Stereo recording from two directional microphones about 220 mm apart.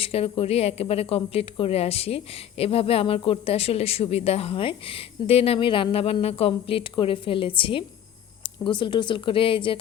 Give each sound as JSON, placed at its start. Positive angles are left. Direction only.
{"t": 0.0, "sound": "speech", "side_deg": 25}